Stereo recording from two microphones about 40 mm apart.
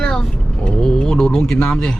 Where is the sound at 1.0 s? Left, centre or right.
Centre.